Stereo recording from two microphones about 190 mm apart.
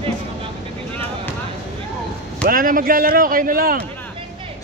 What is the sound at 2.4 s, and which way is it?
A man's voice, 50° right (ahead or behind).